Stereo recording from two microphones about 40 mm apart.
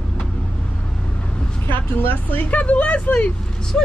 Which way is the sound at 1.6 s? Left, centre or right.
Left.